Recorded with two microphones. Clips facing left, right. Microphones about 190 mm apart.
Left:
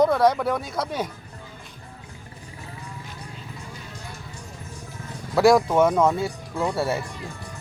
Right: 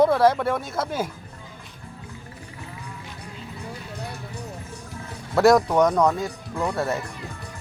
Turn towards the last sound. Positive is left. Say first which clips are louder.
# left 1 dB
turn(degrees=15)  # may be behind; listen again after turning